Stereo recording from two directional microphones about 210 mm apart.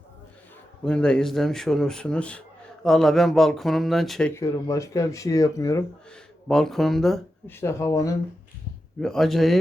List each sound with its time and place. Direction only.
0.9 s speech: 5° left (ahead or behind)
4.4 s speech: 15° left (ahead or behind)
6.1 s speech: centre (ahead or behind)
9.0 s speech: centre (ahead or behind)